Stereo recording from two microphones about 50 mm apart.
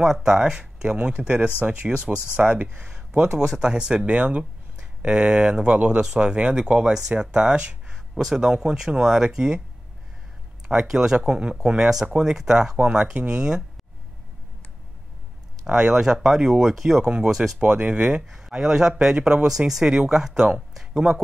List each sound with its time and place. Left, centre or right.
0.0 s speech: centre
8.1 s speech: centre
10.7 s speech: centre
15.6 s speech: centre
17.6 s speech: right
18.3 s speech: centre
20.7 s a sound: centre